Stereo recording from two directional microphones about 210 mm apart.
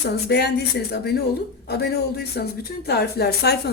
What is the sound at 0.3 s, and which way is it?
Speech, 55° left (ahead or behind).